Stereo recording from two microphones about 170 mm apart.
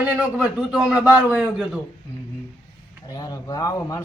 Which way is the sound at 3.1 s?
20° left (ahead or behind).